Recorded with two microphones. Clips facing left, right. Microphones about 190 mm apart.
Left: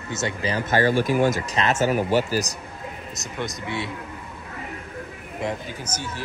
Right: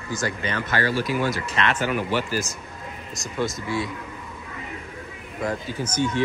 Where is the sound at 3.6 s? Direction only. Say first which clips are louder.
Right 2 dB; 25° left (ahead or behind).